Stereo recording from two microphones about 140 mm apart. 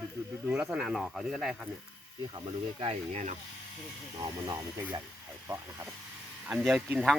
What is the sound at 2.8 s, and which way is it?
Speech, 45° right (ahead or behind).